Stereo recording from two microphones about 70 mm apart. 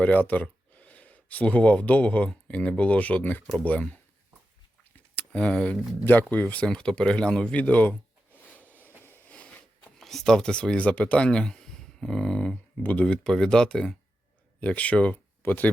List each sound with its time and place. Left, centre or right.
0.0 s speech: left
5.1 s speech: centre
8.4 s a sound: left
10.0 s speech: centre
14.6 s speech: centre